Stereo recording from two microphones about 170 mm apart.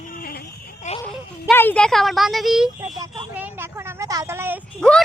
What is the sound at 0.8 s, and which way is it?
Wail, 45° left (ahead or behind).